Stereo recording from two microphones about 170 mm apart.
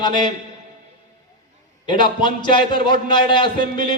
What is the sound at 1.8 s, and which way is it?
A man's voice, 30° left (ahead or behind).